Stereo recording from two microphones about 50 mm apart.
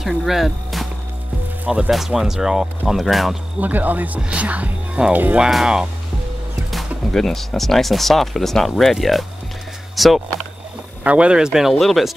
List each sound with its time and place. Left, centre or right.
0.0 s speech: centre
1.9 s speech: centre
3.6 s speech: right
4.2 s music: right
5.4 s speech: centre
7.1 s speech: centre
11.1 s speech: right
11.8 s speech: centre